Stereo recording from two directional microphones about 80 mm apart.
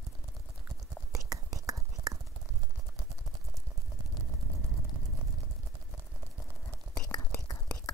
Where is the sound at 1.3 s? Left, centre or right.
Right.